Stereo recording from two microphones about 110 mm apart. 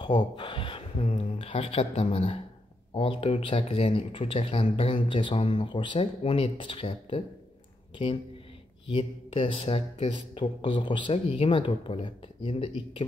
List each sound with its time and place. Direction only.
0.0 s speech: 45° left (ahead or behind)
8.8 s speech: 55° left (ahead or behind)